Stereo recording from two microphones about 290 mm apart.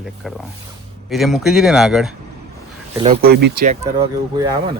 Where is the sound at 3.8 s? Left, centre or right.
Centre.